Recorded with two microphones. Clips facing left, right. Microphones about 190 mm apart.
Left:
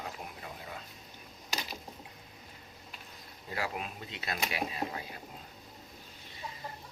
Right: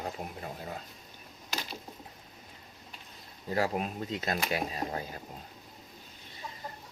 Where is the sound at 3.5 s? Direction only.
40° right (ahead or behind).